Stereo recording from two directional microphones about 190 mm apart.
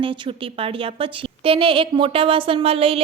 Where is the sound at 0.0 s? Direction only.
25° right (ahead or behind).